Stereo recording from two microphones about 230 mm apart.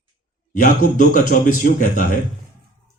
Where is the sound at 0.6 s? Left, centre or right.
Left.